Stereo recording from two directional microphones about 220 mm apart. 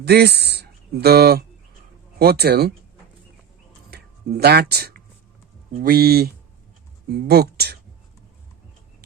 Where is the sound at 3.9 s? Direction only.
45° right (ahead or behind).